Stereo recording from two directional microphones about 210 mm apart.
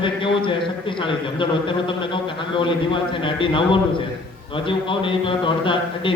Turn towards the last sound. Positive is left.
turn(degrees=25)  # may be behind; listen again after turning